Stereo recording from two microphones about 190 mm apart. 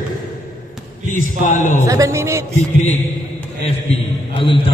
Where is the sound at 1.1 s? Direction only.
45° left (ahead or behind).